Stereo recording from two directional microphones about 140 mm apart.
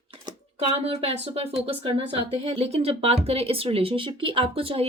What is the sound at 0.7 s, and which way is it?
Speech, 45° right (ahead or behind).